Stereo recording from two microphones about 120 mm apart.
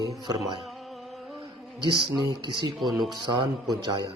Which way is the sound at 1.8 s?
40° right (ahead or behind).